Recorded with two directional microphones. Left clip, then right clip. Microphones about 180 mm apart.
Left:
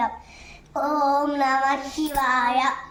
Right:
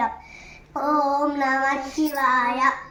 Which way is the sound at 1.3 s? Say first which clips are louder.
Left 1 dB; 20° left (ahead or behind).